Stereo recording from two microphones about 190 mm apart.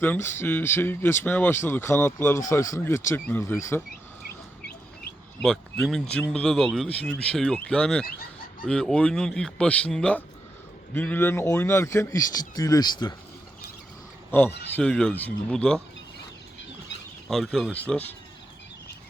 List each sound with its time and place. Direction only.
0.0 s speech: 10° left (ahead or behind)
5.4 s speech: 5° left (ahead or behind); by 13.1 s 20° left (ahead or behind)
14.3 s speech: 10° left (ahead or behind)
17.2 s speech: centre (ahead or behind)